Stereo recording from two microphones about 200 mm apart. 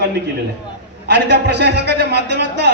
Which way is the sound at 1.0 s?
60° right (ahead or behind).